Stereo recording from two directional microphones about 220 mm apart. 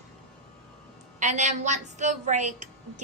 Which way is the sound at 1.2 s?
35° right (ahead or behind).